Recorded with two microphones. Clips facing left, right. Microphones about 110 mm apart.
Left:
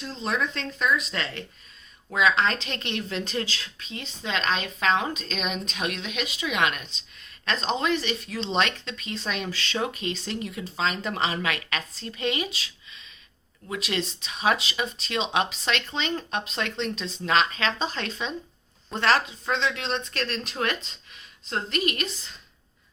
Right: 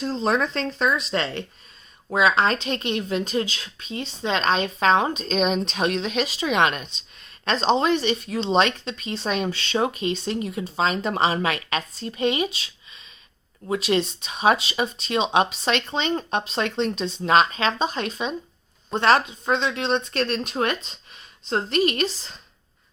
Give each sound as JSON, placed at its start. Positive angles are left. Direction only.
{"t": 0.0, "sound": "a woman's voice", "side_deg": -40}
{"t": 13.7, "sound": "a woman's voice", "side_deg": -25}